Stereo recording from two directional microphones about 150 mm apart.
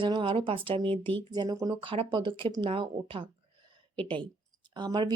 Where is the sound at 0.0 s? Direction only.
35° right (ahead or behind).